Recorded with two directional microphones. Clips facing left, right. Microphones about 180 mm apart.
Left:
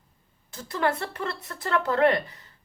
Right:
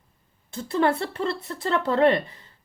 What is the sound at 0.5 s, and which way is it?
Speech, 30° right (ahead or behind).